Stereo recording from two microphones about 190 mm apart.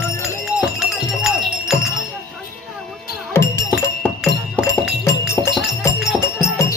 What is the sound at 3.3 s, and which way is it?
Music, 15° left (ahead or behind).